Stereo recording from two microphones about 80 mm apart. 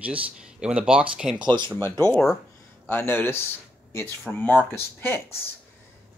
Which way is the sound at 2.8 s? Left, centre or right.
Left.